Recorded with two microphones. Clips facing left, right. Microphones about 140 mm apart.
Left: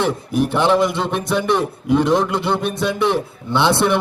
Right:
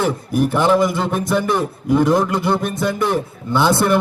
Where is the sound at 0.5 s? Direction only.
5° right (ahead or behind).